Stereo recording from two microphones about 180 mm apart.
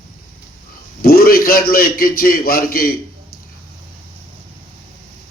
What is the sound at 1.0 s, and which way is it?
Speech, 55° left (ahead or behind).